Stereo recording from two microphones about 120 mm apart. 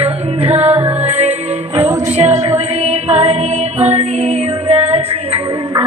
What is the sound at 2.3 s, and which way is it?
Music, 65° right (ahead or behind).